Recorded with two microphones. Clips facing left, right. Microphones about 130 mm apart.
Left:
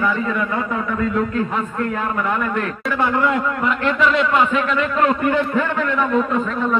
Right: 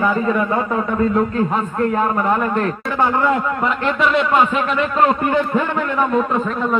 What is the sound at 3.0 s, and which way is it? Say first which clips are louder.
A man's voice: right 2 dB; 25° right (ahead or behind).